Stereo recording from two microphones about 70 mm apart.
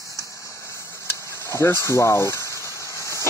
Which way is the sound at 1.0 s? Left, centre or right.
Left.